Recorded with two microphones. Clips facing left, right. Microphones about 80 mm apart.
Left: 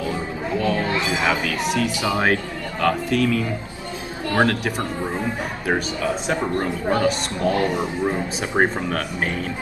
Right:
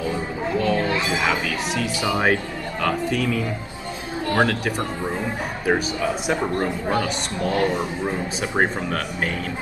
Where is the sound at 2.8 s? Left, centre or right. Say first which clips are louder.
Left 3 dB; centre.